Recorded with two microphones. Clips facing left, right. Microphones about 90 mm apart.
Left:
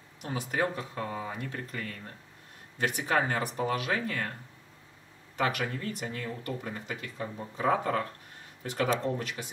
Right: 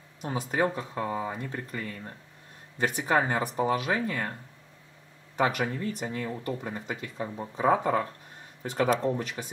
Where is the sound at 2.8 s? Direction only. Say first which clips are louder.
Right 2 dB; 40° right (ahead or behind).